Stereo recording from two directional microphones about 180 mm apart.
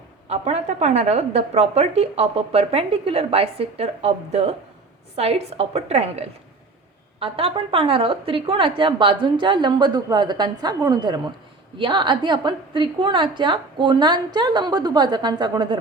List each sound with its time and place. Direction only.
0.3 s a woman's voice: 40° right (ahead or behind)